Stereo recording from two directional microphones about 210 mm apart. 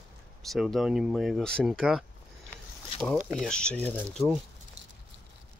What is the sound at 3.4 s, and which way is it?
Speech, 5° left (ahead or behind).